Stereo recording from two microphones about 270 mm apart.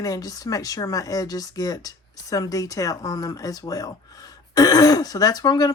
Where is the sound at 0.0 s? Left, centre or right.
Centre.